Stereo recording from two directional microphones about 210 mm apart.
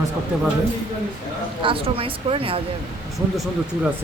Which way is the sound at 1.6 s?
25° right (ahead or behind).